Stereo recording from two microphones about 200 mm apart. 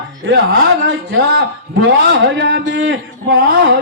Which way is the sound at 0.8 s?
55° right (ahead or behind).